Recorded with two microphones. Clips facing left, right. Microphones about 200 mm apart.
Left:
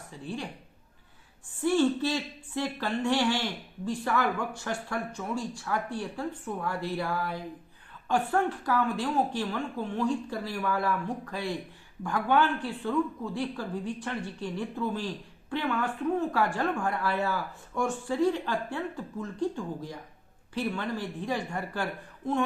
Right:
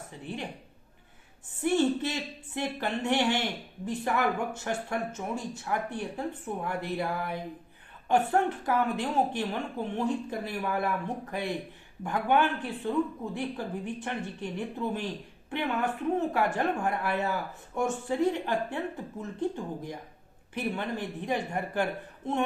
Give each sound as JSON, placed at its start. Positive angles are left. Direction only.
{"t": 0.1, "sound": "speech", "side_deg": -20}
{"t": 1.6, "sound": "speech", "side_deg": -20}